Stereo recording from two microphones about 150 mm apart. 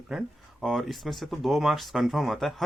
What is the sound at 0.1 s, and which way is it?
Speech, centre (ahead or behind).